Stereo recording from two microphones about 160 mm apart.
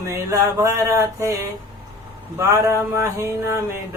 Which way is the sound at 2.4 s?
15° right (ahead or behind).